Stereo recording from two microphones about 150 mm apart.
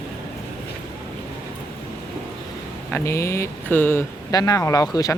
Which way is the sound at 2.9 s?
20° left (ahead or behind).